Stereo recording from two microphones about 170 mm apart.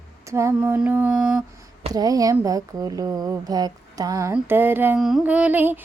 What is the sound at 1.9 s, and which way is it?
Speech, 20° right (ahead or behind).